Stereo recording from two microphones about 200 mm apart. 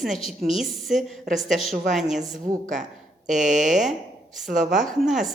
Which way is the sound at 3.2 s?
40° right (ahead or behind).